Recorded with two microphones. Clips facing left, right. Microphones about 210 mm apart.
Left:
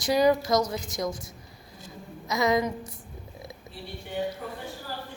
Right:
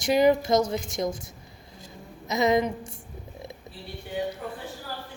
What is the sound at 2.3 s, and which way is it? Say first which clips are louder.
Speech: right 2 dB; 20° right (ahead or behind).